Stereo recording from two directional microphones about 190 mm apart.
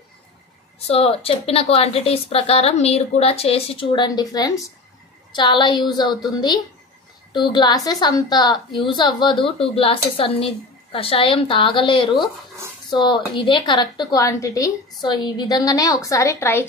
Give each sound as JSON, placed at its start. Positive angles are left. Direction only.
{"t": 0.8, "sound": "a woman's voice", "side_deg": 30}
{"t": 7.3, "sound": "a woman's voice", "side_deg": 25}